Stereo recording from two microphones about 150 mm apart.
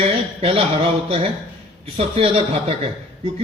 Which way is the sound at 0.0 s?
40° right (ahead or behind).